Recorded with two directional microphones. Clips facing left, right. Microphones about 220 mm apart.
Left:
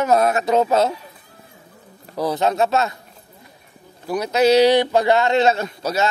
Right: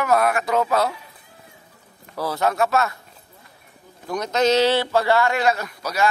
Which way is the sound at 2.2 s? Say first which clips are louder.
Left 3 dB; 20° left (ahead or behind).